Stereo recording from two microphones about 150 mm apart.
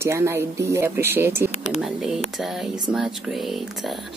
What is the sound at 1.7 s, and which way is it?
Speech, centre (ahead or behind).